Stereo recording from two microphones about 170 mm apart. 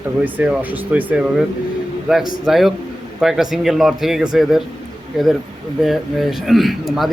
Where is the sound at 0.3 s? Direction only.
10° right (ahead or behind).